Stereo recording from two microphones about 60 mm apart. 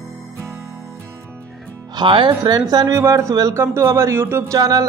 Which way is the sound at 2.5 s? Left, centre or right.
Right.